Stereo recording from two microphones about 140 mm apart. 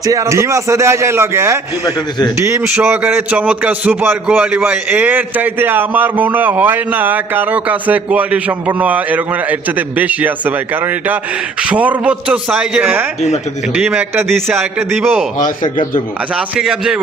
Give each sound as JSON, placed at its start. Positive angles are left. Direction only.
{"t": 0.0, "sound": "speech", "side_deg": -25}
{"t": 1.8, "sound": "a man's voice", "side_deg": 30}
{"t": 2.5, "sound": "a man's voice", "side_deg": -15}
{"t": 15.4, "sound": "speech", "side_deg": 65}
{"t": 16.3, "sound": "a man's voice", "side_deg": -5}